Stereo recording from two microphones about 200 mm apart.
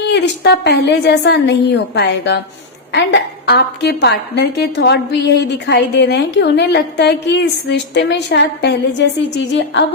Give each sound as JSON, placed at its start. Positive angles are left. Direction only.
{"t": 0.1, "sound": "a woman's voice", "side_deg": 55}